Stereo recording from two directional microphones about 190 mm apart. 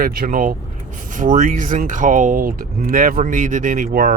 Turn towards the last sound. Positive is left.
turn(degrees=-50)  # may be behind; listen again after turning